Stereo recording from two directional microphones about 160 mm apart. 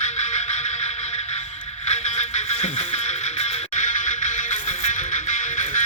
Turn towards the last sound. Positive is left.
turn(degrees=50)  # may be behind; listen again after turning